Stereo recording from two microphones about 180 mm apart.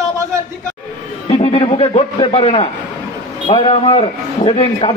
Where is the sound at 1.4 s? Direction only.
30° left (ahead or behind).